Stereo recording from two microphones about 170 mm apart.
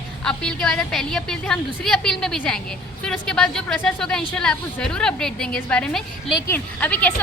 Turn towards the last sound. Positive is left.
turn(degrees=10)  # may be behind; listen again after turning